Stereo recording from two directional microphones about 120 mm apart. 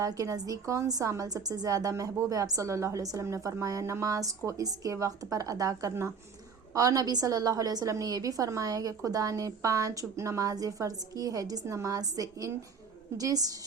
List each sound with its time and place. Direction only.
0.0 s a woman's voice: 30° right (ahead or behind)